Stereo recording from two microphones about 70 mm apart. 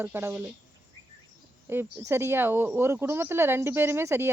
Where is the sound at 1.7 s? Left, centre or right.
Right.